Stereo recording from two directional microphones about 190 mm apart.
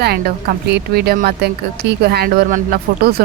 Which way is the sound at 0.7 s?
55° right (ahead or behind).